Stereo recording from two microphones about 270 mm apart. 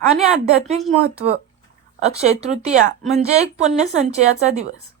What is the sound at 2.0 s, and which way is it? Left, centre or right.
Speech, right.